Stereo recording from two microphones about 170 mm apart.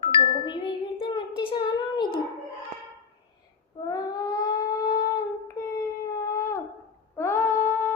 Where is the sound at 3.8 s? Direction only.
20° left (ahead or behind).